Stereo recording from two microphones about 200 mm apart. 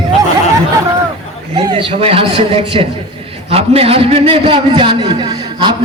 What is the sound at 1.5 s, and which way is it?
A man's voice, 25° right (ahead or behind).